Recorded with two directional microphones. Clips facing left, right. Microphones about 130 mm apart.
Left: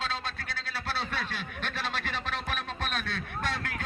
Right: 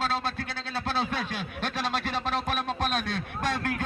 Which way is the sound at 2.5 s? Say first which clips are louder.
Right 6 dB; 35° right (ahead or behind).